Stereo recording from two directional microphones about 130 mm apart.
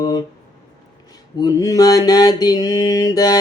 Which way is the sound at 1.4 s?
30° left (ahead or behind).